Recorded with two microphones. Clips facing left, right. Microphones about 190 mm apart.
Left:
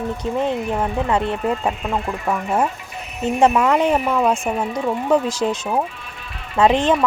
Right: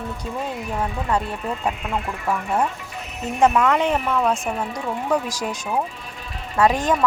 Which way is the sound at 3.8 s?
40° left (ahead or behind).